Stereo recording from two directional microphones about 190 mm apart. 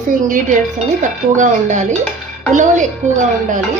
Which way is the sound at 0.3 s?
45° right (ahead or behind).